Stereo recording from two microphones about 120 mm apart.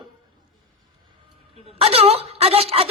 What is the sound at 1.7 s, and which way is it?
Speech, 55° right (ahead or behind).